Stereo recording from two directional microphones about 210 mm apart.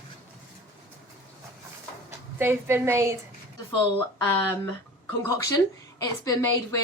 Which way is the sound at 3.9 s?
10° left (ahead or behind).